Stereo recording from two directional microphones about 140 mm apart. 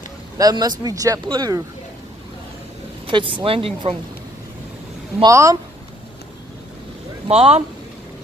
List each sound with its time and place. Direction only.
0.4 s speech: 30° right (ahead or behind)
3.1 s speech: 35° right (ahead or behind)
5.2 s speech: 25° right (ahead or behind)
7.2 s speech: 50° right (ahead or behind)